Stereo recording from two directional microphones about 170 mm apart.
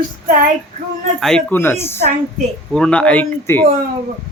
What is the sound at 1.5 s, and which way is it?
Speech, 15° left (ahead or behind).